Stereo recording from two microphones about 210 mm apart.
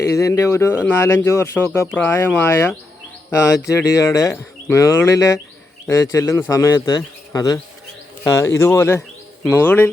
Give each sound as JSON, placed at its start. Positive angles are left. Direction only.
{"t": 0.0, "sound": "speech", "side_deg": 15}